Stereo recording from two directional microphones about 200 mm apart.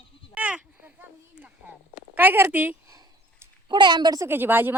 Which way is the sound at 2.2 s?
10° right (ahead or behind).